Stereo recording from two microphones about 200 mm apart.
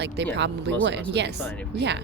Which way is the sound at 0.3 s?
60° right (ahead or behind).